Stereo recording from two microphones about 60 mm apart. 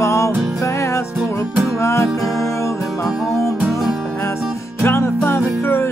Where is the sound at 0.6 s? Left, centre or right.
Left.